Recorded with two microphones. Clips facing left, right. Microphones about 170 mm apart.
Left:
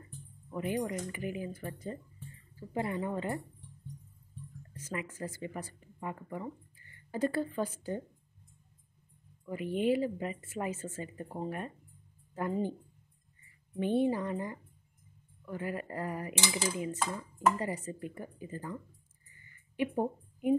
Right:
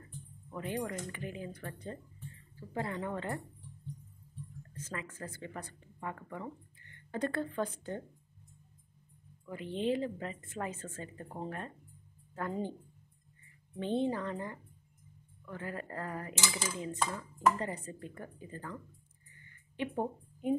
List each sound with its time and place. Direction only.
0.5 s speech: 10° left (ahead or behind)
4.7 s speech: 10° left (ahead or behind)
9.5 s speech: 10° left (ahead or behind)
13.7 s speech: 10° left (ahead or behind)
19.8 s speech: 10° left (ahead or behind)